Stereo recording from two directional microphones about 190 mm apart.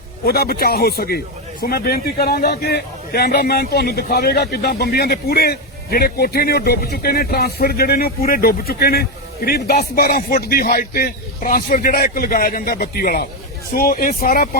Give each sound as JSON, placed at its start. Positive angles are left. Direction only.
{"t": 0.3, "sound": "a man's voice", "side_deg": 55}